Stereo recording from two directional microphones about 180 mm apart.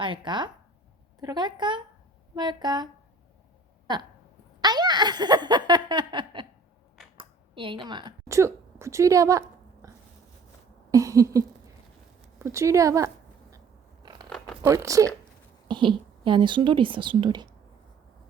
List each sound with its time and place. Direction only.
0.0 s a woman's voice: 25° right (ahead or behind)
4.6 s giggle: 25° right (ahead or behind)
7.2 s a woman's voice: 30° right (ahead or behind)
9.8 s dog: 15° right (ahead or behind)
10.9 s speech: 15° right (ahead or behind)
14.0 s scissors: 25° right (ahead or behind)
14.3 s zipper: centre (ahead or behind)
14.6 s a woman's voice: 15° right (ahead or behind)